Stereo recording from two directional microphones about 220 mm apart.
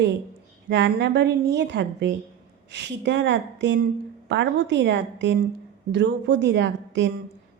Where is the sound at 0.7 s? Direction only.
55° right (ahead or behind).